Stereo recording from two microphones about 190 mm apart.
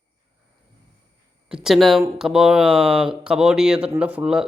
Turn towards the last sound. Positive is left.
turn(degrees=-5)  # may be behind; listen again after turning